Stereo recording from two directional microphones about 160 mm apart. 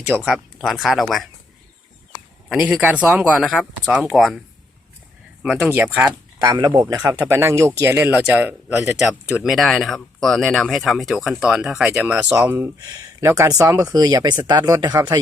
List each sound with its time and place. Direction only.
0.0 s speech: 10° right (ahead or behind)
2.5 s speech: 5° right (ahead or behind)
5.4 s speech: 5° right (ahead or behind)
6.1 s speech: 25° right (ahead or behind)